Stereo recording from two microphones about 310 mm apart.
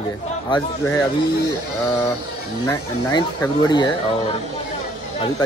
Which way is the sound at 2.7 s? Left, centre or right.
Centre.